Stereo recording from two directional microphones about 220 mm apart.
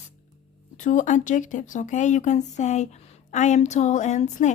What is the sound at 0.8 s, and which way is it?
Speech, 35° left (ahead or behind).